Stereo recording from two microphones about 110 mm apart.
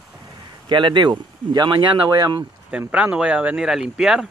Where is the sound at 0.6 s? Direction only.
45° right (ahead or behind).